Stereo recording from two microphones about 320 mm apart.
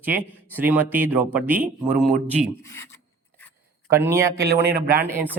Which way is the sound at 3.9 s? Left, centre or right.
Centre.